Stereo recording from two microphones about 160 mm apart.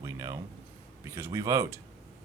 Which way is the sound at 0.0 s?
20° right (ahead or behind).